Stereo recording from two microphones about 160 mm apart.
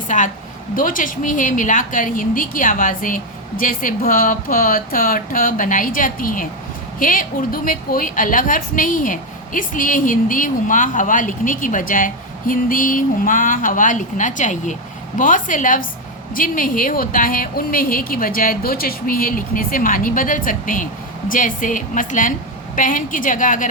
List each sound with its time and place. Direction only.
0.1 s a woman's voice: 50° left (ahead or behind)